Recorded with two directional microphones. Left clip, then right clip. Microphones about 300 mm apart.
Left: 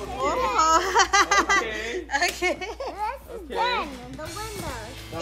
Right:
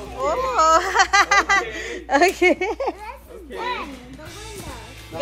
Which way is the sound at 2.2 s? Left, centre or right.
Centre.